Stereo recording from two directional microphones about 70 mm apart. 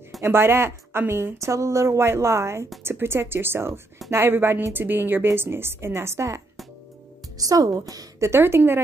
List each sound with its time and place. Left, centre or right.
0.2 s a woman's voice: right
7.3 s a woman's voice: right
8.2 s a woman's voice: right